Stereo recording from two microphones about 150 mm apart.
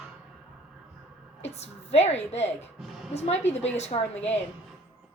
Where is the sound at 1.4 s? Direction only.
45° left (ahead or behind).